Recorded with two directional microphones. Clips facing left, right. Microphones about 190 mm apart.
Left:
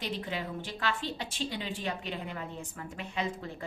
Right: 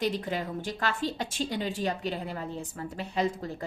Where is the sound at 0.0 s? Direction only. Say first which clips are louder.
Right 6 dB; 45° right (ahead or behind).